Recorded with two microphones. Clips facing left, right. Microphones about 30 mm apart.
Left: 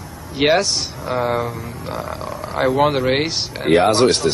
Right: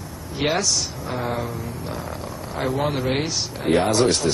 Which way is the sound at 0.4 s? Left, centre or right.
Left.